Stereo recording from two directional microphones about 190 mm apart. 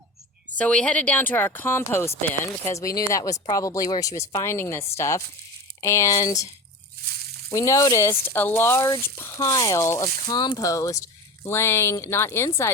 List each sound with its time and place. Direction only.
0.6 s speech: 5° left (ahead or behind)
7.5 s speech: 15° left (ahead or behind)